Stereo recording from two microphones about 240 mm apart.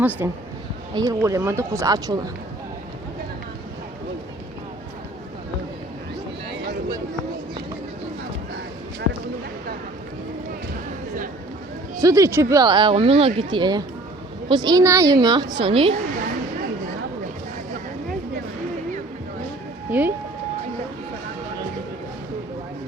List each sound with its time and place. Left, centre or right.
0.0 s speech: centre
11.9 s speech: centre
19.9 s speech: centre